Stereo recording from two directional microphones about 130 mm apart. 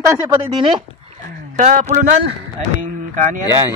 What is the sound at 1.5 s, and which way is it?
Speech, 70° right (ahead or behind).